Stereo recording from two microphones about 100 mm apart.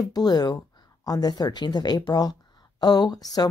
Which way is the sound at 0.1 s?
40° left (ahead or behind).